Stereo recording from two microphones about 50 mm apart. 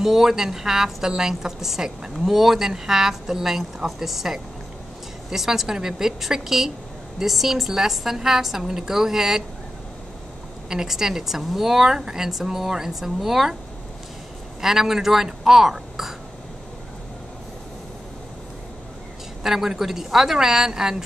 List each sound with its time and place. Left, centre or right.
0.0 s a woman's voice: centre
10.7 s a woman's voice: centre
14.6 s speech: centre
19.4 s a woman's voice: centre